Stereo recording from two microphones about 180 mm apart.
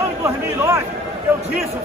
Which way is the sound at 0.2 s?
15° right (ahead or behind).